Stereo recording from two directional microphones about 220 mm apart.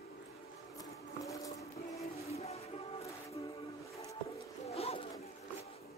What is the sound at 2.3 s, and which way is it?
Music, 30° left (ahead or behind).